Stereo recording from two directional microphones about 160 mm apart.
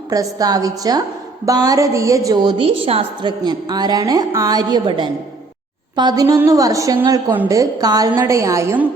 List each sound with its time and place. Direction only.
0.1 s a woman's voice: 20° right (ahead or behind)